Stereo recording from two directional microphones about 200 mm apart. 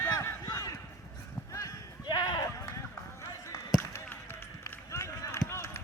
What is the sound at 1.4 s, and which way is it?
Clip-clop, 15° left (ahead or behind).